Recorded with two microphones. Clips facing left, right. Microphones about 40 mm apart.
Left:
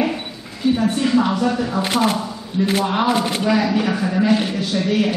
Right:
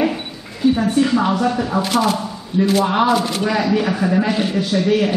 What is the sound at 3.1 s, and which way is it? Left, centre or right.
Speech, centre.